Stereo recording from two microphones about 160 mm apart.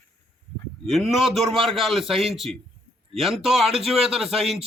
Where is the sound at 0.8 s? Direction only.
Centre (ahead or behind).